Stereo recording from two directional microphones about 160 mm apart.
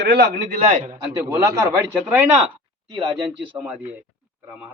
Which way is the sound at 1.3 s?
15° right (ahead or behind).